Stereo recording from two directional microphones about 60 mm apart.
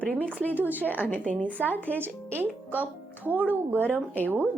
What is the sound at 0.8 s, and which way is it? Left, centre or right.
A woman's voice, left.